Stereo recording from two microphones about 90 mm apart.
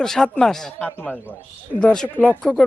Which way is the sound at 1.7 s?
5° left (ahead or behind).